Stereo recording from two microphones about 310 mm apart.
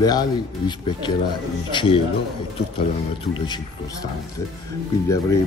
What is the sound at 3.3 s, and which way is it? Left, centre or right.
Speech, centre.